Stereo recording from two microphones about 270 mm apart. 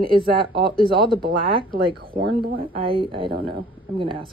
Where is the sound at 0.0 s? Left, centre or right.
Centre.